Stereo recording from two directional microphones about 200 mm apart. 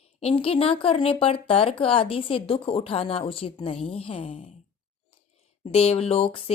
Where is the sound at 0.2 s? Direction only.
30° left (ahead or behind).